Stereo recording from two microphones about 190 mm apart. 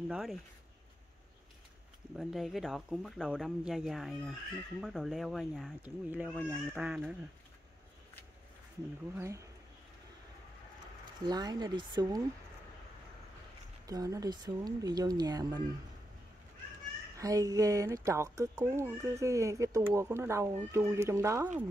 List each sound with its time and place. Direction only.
0.1 s speech: centre (ahead or behind)
2.1 s speech: centre (ahead or behind)
9.1 s speech: 15° right (ahead or behind)
11.2 s speech: 20° right (ahead or behind)
13.8 s speech: 20° right (ahead or behind)
17.2 s speech: 15° right (ahead or behind)